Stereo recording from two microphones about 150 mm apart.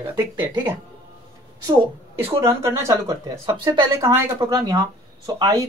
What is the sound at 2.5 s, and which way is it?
A man's voice, 20° right (ahead or behind).